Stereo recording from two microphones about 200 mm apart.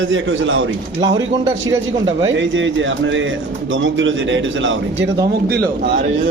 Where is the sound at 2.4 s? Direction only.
70° right (ahead or behind).